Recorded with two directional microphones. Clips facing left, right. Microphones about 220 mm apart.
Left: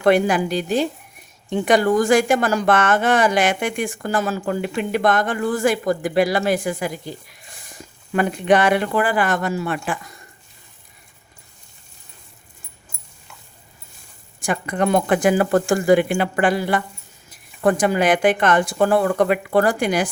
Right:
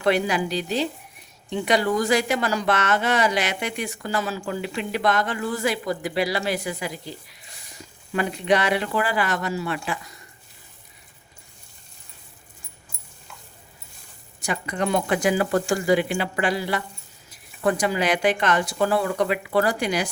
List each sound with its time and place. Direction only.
0.0 s a woman's voice: 50° left (ahead or behind)
14.4 s a woman's voice: 50° left (ahead or behind)